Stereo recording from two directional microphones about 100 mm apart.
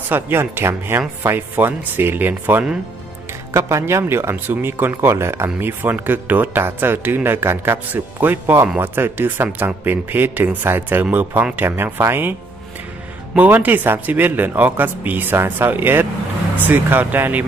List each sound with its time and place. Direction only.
0.1 s speech: 20° right (ahead or behind)
13.4 s speech: 20° right (ahead or behind)